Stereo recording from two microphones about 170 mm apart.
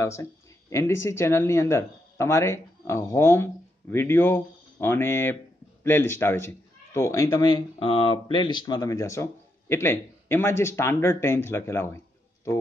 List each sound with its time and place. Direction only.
0.0 s a man's voice: 15° left (ahead or behind)